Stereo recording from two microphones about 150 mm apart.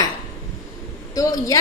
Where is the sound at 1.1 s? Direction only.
25° left (ahead or behind).